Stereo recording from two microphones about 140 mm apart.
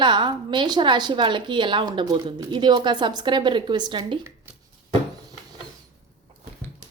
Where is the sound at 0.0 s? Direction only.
35° right (ahead or behind).